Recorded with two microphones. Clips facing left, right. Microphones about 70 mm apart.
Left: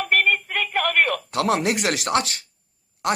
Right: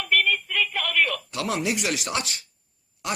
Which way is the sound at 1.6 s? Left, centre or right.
Left.